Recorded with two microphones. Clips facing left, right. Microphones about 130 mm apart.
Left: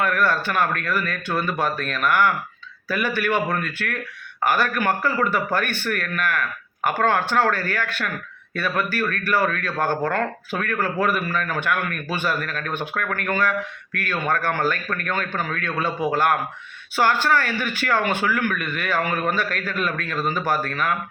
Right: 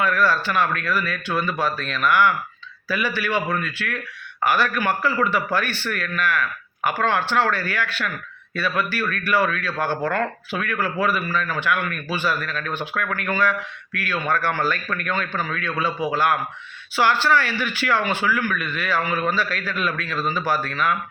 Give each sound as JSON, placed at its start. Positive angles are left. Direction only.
{"t": 0.0, "sound": "a man's voice", "side_deg": 55}